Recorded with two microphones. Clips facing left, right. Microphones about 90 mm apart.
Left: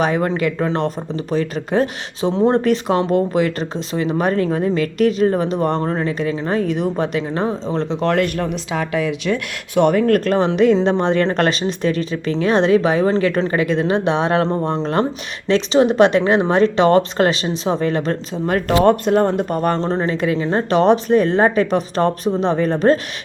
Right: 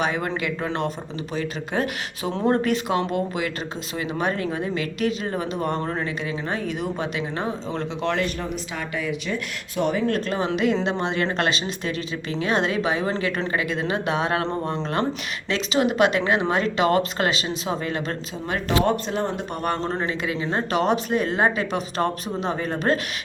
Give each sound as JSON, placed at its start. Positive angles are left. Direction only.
{"t": 0.0, "sound": "speech", "side_deg": 40}
{"t": 2.3, "sound": "speech", "side_deg": 20}
{"t": 2.6, "sound": "speech", "side_deg": 35}
{"t": 8.1, "sound": "speech", "side_deg": 60}
{"t": 9.0, "sound": "speech", "side_deg": 90}
{"t": 10.3, "sound": "speech", "side_deg": 40}
{"t": 15.4, "sound": "speech", "side_deg": 35}
{"t": 19.8, "sound": "speech", "side_deg": 30}
{"t": 20.1, "sound": "speech", "side_deg": 40}